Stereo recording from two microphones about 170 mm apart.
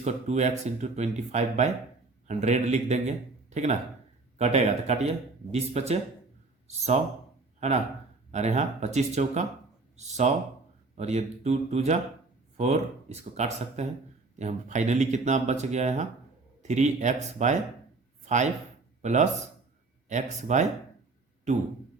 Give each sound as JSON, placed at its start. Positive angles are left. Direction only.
{"t": 0.0, "sound": "a man's voice", "side_deg": -40}
{"t": 8.3, "sound": "speech", "side_deg": -40}
{"t": 20.4, "sound": "speech", "side_deg": -45}